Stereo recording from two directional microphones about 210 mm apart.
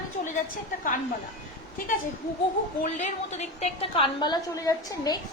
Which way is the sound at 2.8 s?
35° left (ahead or behind).